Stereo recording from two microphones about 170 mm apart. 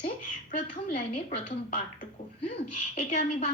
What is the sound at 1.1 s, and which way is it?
Speech, 35° left (ahead or behind).